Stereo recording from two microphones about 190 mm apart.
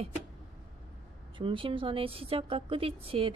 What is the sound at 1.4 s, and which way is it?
A woman's voice, 25° right (ahead or behind).